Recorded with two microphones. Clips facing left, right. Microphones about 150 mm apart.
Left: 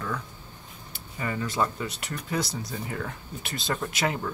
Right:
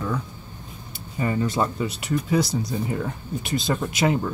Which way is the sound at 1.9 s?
10° right (ahead or behind).